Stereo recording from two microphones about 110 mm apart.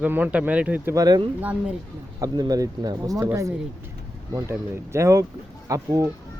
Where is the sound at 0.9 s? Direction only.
35° right (ahead or behind).